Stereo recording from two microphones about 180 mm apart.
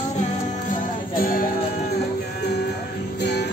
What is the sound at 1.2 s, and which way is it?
Music, 55° left (ahead or behind).